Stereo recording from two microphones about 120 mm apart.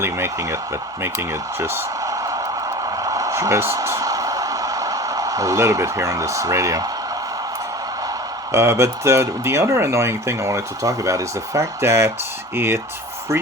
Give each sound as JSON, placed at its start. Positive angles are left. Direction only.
{"t": 0.0, "sound": "speech", "side_deg": -20}
{"t": 1.5, "sound": "a sound", "side_deg": -20}
{"t": 8.5, "sound": "speech", "side_deg": -25}